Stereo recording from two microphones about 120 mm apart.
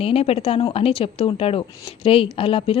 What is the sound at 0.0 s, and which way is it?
A woman's voice, 55° left (ahead or behind).